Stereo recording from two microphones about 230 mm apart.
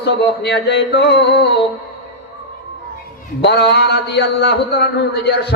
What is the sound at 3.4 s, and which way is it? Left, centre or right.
A man's voice, left.